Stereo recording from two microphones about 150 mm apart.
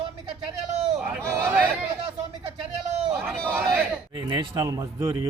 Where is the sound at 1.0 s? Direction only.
10° right (ahead or behind).